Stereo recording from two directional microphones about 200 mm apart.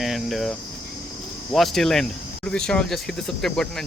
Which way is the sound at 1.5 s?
Centre (ahead or behind).